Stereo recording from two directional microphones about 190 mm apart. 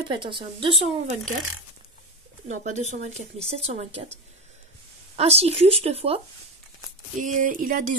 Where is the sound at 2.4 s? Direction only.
40° right (ahead or behind).